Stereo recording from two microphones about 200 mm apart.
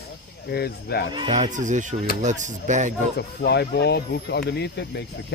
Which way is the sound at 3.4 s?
55° left (ahead or behind).